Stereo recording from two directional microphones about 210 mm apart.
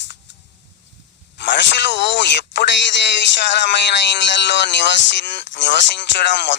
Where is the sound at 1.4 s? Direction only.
55° left (ahead or behind).